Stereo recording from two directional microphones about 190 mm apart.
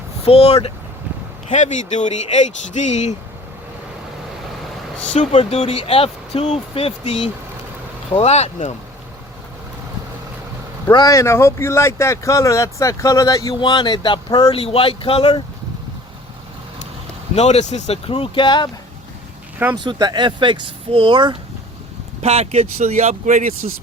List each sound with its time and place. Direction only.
0.3 s speech: 30° left (ahead or behind)
5.1 s speech: 35° left (ahead or behind)
10.9 s speech: 15° left (ahead or behind)
17.3 s speech: 35° left (ahead or behind)
19.7 s speech: 20° right (ahead or behind); by 23.6 s 40° right (ahead or behind)
23.6 s speech: 90° right